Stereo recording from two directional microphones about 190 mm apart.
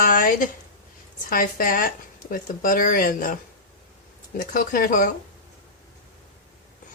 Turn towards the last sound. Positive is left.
turn(degrees=45)  # may be behind; listen again after turning